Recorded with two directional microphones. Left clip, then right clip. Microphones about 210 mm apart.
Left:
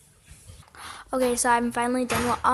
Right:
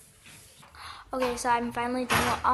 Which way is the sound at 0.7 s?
35° left (ahead or behind).